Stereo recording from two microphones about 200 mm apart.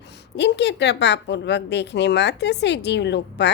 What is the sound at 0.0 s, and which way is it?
A woman's voice, 60° left (ahead or behind).